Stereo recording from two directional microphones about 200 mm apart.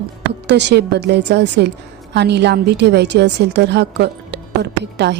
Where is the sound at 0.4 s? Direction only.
60° right (ahead or behind).